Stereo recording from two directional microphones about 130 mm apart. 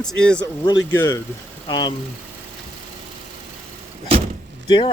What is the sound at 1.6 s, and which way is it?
Speech, 35° left (ahead or behind).